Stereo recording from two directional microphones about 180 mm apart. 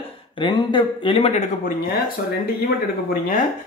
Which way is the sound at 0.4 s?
25° left (ahead or behind).